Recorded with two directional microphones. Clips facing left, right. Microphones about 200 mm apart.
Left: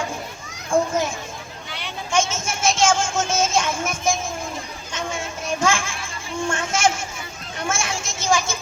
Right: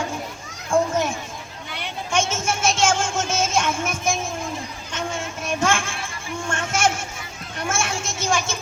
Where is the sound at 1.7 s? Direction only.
60° right (ahead or behind).